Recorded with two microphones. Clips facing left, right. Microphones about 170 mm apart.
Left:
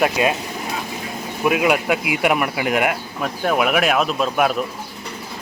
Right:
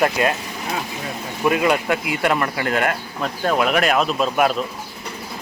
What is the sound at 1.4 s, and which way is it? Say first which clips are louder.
Speech: even; 5° left (ahead or behind).